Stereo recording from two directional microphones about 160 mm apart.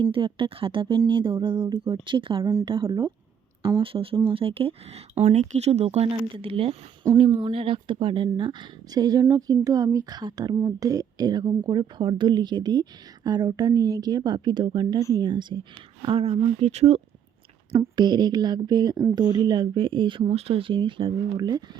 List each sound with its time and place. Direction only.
0.0 s speech: 30° right (ahead or behind)
17.7 s speech: 30° right (ahead or behind)
19.2 s speech: 25° left (ahead or behind)
19.5 s speech: 30° right (ahead or behind)